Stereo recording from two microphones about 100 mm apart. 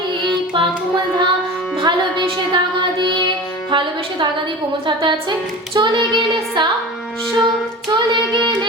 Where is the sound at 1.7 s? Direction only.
50° right (ahead or behind).